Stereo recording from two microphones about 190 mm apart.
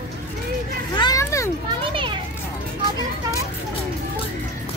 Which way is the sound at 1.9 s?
25° right (ahead or behind).